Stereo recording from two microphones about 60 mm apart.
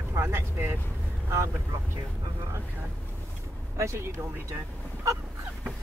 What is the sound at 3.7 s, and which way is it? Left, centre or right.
Speech, right.